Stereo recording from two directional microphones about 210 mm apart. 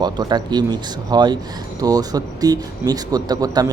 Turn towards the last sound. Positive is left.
turn(degrees=-20)  # may be behind; listen again after turning